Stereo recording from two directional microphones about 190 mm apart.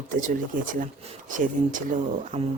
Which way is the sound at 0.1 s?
45° right (ahead or behind).